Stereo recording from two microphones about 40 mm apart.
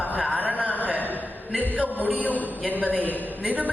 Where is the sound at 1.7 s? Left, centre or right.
Right.